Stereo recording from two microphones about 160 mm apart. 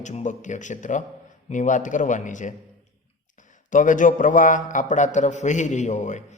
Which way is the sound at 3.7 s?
55° left (ahead or behind).